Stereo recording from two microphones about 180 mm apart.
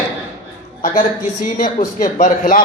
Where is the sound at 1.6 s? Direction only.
45° left (ahead or behind).